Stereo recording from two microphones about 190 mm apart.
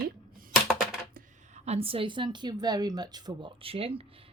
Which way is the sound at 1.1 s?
35° right (ahead or behind).